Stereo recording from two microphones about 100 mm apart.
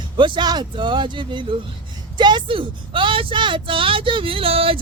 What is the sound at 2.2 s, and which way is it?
Speech, 50° right (ahead or behind).